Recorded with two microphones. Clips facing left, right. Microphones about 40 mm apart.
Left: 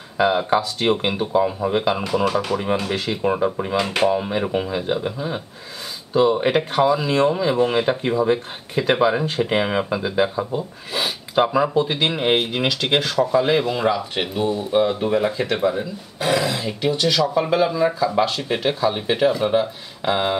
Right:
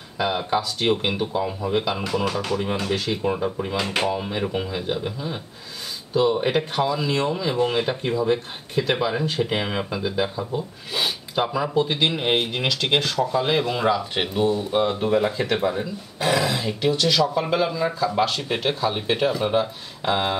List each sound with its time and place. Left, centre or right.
0.2 s speech: centre
1.3 s speech: left
3.6 s speech: centre
11.7 s speech: centre